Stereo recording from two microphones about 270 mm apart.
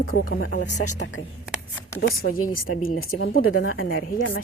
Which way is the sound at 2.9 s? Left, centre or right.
Left.